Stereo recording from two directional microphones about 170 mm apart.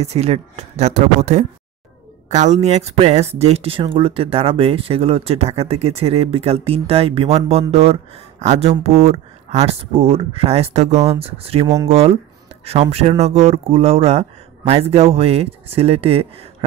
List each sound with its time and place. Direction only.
0.0 s speech: 40° right (ahead or behind)
11.6 s speech: 20° right (ahead or behind)
11.9 s speech: 40° right (ahead or behind)
13.2 s speech: 40° right (ahead or behind)